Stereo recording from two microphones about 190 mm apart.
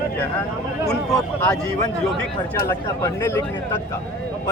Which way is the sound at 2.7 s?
15° left (ahead or behind).